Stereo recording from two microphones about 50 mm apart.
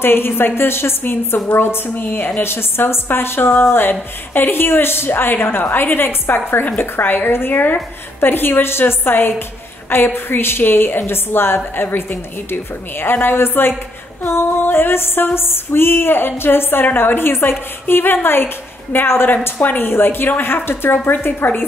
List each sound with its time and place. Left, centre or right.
0.0 s a woman's voice: left